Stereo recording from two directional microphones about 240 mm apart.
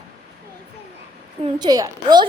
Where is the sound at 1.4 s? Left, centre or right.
Centre.